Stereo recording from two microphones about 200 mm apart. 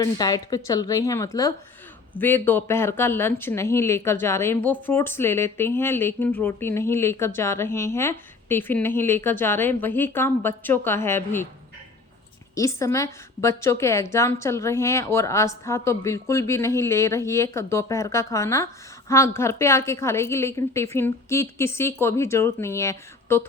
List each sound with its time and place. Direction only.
0.0 s a woman's voice: 20° left (ahead or behind)
12.5 s a woman's voice: 15° left (ahead or behind)